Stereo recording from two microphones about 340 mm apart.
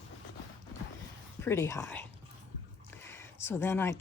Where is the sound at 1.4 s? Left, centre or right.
Centre.